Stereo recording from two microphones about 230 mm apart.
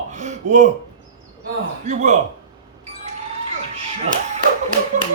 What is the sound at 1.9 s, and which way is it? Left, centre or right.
Speech, right.